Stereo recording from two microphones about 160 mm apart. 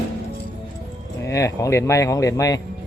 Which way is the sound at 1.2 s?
20° left (ahead or behind).